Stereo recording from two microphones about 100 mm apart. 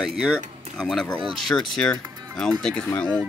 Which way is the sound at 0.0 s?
5° right (ahead or behind).